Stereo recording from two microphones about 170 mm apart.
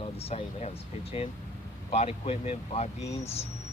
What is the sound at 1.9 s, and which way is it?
Speech, 35° left (ahead or behind).